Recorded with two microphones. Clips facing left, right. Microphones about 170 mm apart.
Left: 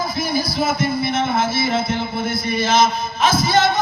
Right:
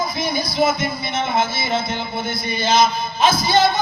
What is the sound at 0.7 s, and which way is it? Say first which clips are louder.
Speech: left 2 dB; 30° left (ahead or behind).